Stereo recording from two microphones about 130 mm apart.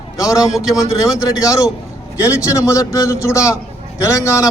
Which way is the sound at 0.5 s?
5° right (ahead or behind).